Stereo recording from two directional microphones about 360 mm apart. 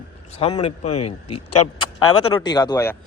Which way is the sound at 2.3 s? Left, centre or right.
Centre.